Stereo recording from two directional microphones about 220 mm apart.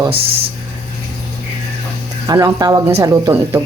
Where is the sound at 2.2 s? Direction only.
15° right (ahead or behind).